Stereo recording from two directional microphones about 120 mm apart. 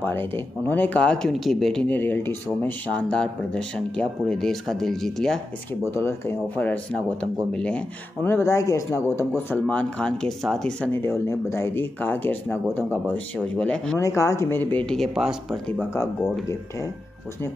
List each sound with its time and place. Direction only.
0.0 s speech: 20° left (ahead or behind)
5.9 s speech: 20° left (ahead or behind)
9.5 s speech: 10° left (ahead or behind)
11.1 s speech: 20° left (ahead or behind)
13.9 s speech: 25° left (ahead or behind); by 15.0 s 10° left (ahead or behind)
15.1 s speech: 5° right (ahead or behind)